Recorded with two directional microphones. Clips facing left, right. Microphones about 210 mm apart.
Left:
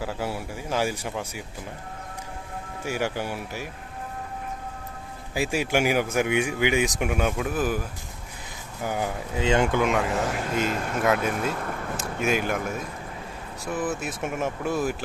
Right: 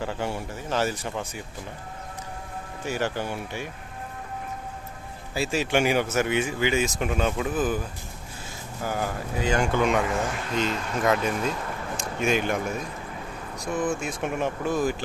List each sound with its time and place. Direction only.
0.0 s speech: 5° left (ahead or behind)
2.8 s speech: 10° left (ahead or behind)
5.3 s speech: 15° left (ahead or behind)
9.7 s speech: centre (ahead or behind)